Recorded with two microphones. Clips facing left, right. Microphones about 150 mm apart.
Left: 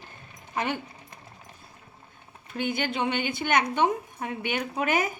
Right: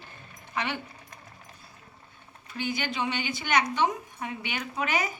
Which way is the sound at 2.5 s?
55° left (ahead or behind).